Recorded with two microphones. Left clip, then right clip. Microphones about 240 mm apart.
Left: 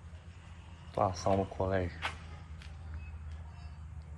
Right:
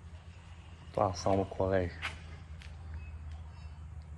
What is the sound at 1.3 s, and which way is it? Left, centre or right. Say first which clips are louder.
Speech: even; right.